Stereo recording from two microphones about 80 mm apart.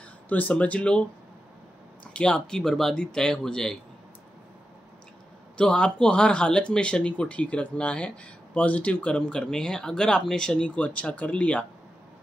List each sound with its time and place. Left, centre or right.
0.3 s speech: centre
2.1 s speech: centre
5.6 s speech: centre